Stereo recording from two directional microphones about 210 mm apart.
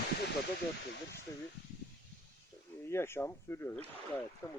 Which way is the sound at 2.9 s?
10° left (ahead or behind).